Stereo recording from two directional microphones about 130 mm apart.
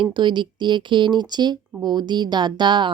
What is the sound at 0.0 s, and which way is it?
Speech, 35° right (ahead or behind).